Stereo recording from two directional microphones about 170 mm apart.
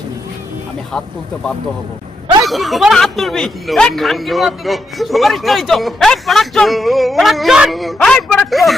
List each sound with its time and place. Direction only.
2.4 s speech: centre (ahead or behind)